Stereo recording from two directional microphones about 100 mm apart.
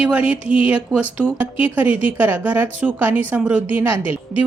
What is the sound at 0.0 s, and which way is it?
Speech, 10° right (ahead or behind).